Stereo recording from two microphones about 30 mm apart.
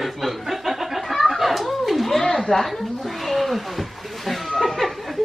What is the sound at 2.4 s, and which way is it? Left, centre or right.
Speech, centre.